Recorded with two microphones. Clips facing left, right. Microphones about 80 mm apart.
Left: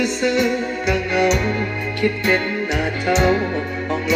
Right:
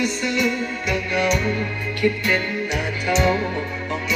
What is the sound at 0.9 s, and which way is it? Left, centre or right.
Music, left.